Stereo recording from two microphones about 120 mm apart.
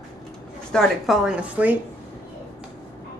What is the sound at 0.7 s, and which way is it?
Speech, 5° left (ahead or behind).